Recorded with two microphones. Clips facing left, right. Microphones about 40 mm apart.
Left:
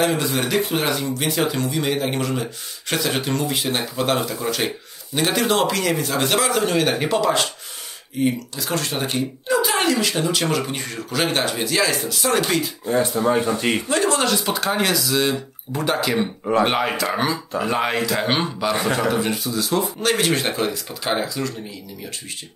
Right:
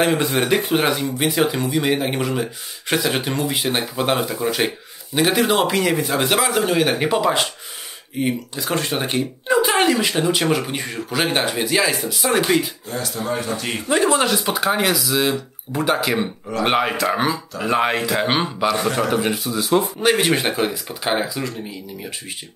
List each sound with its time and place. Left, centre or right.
0.0 s speech: right
12.8 s a man's voice: left
13.8 s speech: centre
18.7 s a man's voice: left
18.9 s speech: centre